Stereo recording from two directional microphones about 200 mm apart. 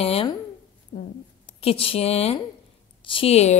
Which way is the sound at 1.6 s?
30° left (ahead or behind).